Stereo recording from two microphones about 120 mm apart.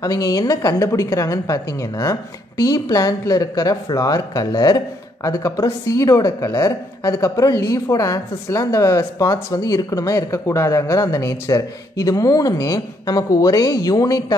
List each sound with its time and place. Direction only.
0.0 s a woman's voice: 30° left (ahead or behind)